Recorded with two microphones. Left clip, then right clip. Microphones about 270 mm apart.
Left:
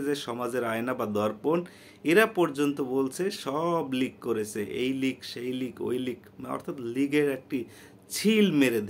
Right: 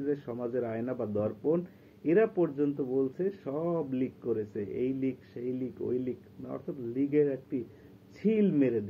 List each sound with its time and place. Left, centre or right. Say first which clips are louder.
0.0 s speech: left 3 dB; centre